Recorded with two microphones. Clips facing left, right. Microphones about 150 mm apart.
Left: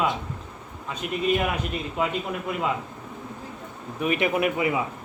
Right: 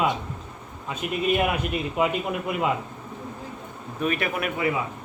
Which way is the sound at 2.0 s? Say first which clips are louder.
Right 3 dB; 15° right (ahead or behind).